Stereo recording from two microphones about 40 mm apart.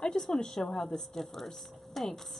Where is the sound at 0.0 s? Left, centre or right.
Centre.